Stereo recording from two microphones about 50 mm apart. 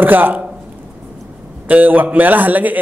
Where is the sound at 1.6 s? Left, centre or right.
Right.